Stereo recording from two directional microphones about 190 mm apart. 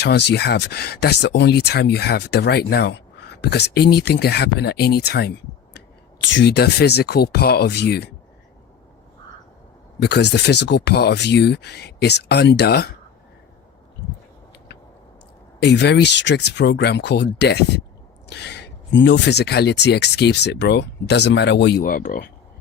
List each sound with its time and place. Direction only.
0.0 s speech: 60° left (ahead or behind)
10.0 s speech: 65° left (ahead or behind)
15.6 s speech: 60° left (ahead or behind)